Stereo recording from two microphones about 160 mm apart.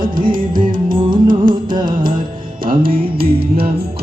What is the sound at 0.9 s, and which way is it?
Music, 30° right (ahead or behind).